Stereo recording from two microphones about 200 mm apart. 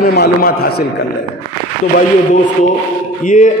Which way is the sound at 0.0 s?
50° left (ahead or behind).